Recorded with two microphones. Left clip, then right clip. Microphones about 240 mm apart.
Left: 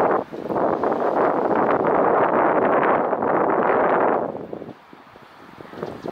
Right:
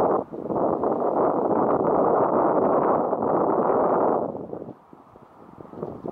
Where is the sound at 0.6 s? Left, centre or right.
Centre.